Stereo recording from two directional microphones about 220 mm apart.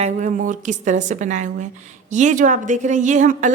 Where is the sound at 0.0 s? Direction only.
30° right (ahead or behind).